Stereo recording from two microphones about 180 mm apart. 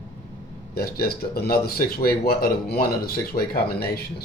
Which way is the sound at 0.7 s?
60° left (ahead or behind).